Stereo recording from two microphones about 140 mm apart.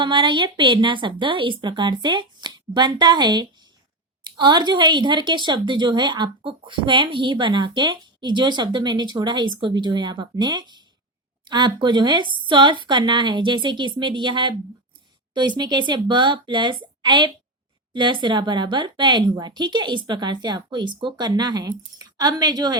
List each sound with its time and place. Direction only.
0.0 s speech: 35° right (ahead or behind)